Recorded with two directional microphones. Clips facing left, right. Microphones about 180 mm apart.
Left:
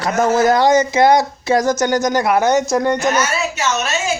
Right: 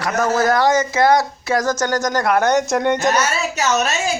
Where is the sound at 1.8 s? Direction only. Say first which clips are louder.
Left 3 dB; 10° left (ahead or behind).